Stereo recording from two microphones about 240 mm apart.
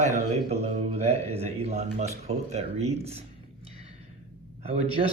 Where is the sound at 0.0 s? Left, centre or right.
Right.